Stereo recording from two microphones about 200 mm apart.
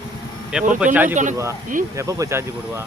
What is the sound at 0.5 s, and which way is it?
Speech, 5° right (ahead or behind).